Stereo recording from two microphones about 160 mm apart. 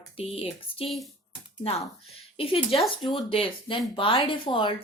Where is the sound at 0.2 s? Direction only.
35° left (ahead or behind).